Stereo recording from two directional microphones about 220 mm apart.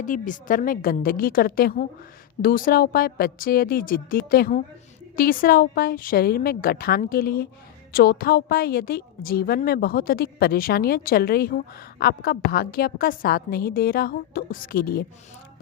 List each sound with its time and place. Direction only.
0.0 s a woman's voice: 35° left (ahead or behind)